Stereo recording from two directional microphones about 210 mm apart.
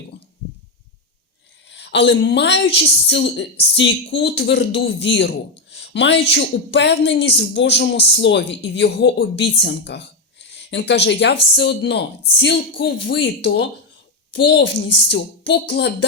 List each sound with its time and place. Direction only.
1.7 s a woman's voice: 55° left (ahead or behind)